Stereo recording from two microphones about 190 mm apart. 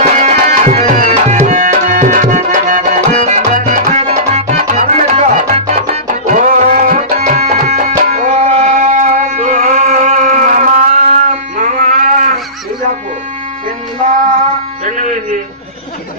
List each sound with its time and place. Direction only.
0.0 s tabla: 40° right (ahead or behind)
8.4 s music: 40° right (ahead or behind)
14.0 s female singing: 40° right (ahead or behind)